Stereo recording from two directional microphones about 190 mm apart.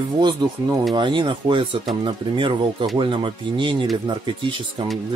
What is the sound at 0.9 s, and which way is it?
Speech, 25° right (ahead or behind).